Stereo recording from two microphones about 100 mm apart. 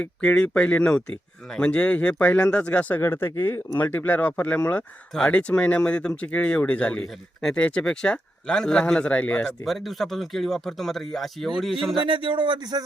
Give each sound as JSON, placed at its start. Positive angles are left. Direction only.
{"t": 0.0, "sound": "a man's voice", "side_deg": 15}
{"t": 3.0, "sound": "speech", "side_deg": 25}
{"t": 3.8, "sound": "a man's voice", "side_deg": 20}
{"t": 9.6, "sound": "speech", "side_deg": 0}
{"t": 11.9, "sound": "speech", "side_deg": -60}